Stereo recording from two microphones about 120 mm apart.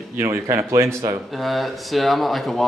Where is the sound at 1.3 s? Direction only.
Centre (ahead or behind).